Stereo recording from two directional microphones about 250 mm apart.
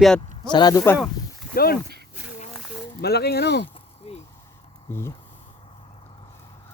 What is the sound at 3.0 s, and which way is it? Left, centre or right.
Speech, left.